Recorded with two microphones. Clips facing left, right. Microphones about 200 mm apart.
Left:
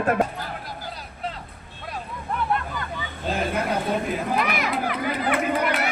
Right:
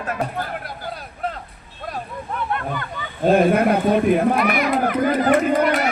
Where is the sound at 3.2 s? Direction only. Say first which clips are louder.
Right 11 dB; 60° right (ahead or behind).